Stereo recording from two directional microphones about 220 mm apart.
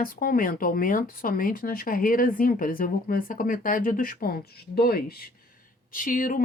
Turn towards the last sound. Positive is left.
turn(degrees=40)  # may be behind; listen again after turning